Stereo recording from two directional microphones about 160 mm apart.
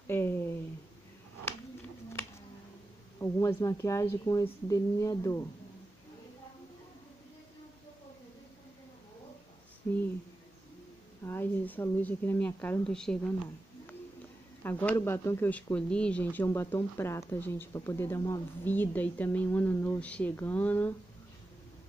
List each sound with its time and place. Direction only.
3.2 s speech: 20° left (ahead or behind)
9.8 s speech: 10° left (ahead or behind)
11.2 s speech: 10° left (ahead or behind)
14.6 s speech: 10° left (ahead or behind)